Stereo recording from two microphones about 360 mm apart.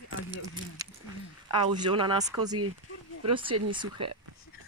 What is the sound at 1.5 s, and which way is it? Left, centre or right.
Speech, centre.